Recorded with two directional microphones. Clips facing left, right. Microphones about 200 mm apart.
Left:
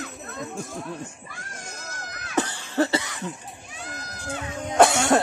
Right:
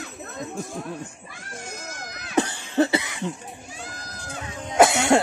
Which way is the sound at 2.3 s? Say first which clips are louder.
Right 2 dB; 15° right (ahead or behind).